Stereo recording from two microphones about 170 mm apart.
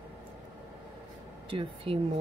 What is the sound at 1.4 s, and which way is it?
Speech, 35° right (ahead or behind).